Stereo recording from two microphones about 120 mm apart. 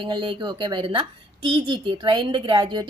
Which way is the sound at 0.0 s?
45° right (ahead or behind).